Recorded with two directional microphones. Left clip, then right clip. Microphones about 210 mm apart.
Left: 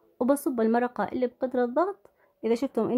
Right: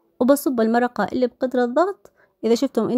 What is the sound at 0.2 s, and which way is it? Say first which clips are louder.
Speech: right 7 dB; 20° right (ahead or behind).